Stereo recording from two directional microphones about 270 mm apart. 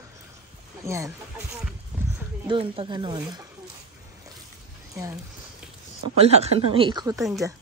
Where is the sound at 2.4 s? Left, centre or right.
Centre.